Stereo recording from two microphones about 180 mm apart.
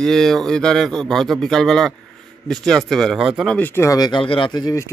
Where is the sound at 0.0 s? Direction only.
Centre (ahead or behind).